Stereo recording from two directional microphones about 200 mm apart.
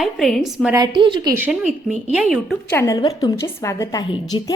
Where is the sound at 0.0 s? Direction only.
Centre (ahead or behind).